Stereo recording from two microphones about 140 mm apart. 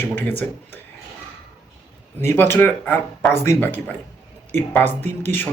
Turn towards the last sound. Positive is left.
turn(degrees=15)  # may be behind; listen again after turning